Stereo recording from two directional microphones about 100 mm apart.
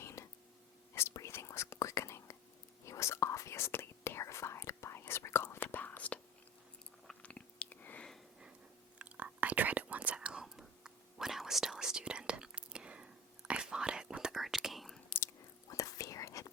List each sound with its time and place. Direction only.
0.0 s a sound: 30° left (ahead or behind)
0.9 s whispering: 30° left (ahead or behind)
7.1 s chewing: 10° left (ahead or behind)
9.0 s whispering: 15° right (ahead or behind); by 15.0 s centre (ahead or behind)
15.7 s whispering: 35° left (ahead or behind)